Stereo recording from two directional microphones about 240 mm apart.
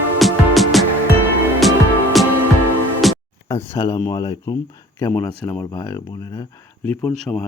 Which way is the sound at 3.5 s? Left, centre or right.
Centre.